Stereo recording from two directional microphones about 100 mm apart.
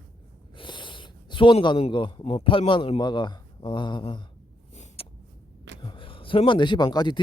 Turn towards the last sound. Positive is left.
turn(degrees=50)  # may be behind; listen again after turning